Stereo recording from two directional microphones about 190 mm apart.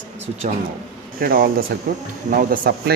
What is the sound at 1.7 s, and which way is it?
Speech, 65° right (ahead or behind).